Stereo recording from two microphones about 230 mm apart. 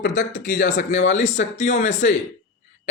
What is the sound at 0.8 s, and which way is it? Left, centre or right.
Speech, left.